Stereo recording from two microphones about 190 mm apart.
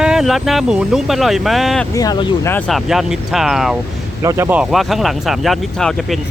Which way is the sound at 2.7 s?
Centre (ahead or behind).